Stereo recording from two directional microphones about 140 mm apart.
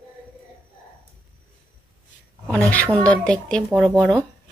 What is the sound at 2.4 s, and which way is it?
Speech, 10° left (ahead or behind).